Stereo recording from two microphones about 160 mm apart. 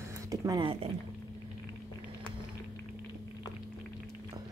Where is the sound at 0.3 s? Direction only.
20° right (ahead or behind).